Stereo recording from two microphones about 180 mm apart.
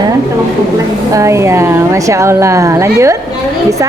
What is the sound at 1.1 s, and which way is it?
A woman's voice, 15° right (ahead or behind).